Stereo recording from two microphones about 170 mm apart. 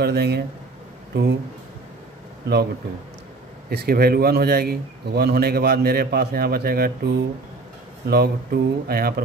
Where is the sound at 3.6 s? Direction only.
65° right (ahead or behind).